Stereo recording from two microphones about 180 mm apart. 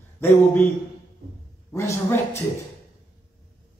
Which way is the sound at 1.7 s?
15° left (ahead or behind).